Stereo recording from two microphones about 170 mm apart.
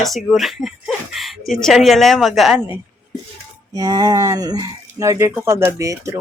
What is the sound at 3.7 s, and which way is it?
Speech, 25° right (ahead or behind).